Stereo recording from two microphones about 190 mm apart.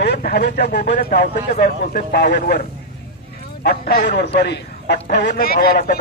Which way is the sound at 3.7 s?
55° left (ahead or behind).